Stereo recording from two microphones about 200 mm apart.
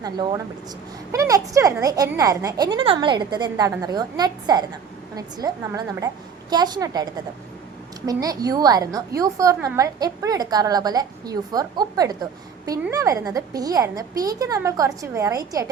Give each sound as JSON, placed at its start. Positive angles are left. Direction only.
{"t": 0.0, "sound": "a woman's voice", "side_deg": -20}